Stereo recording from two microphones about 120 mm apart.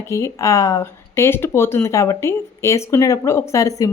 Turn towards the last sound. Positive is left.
turn(degrees=30)  # may be behind; listen again after turning